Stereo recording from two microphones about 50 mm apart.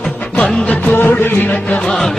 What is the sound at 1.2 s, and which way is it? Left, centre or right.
Chant, left.